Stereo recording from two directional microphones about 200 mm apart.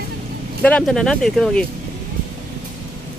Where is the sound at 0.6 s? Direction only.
5° left (ahead or behind).